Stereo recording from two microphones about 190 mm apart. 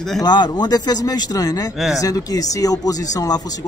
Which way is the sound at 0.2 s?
20° left (ahead or behind).